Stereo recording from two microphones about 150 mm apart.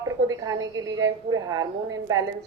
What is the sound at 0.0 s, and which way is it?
A woman's voice, 25° right (ahead or behind).